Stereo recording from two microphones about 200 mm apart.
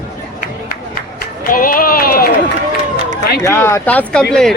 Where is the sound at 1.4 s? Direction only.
45° left (ahead or behind).